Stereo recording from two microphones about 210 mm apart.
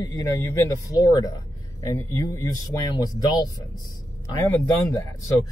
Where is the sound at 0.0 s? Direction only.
15° left (ahead or behind).